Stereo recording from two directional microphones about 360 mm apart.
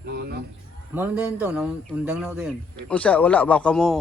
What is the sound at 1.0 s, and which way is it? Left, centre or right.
A man's voice, centre.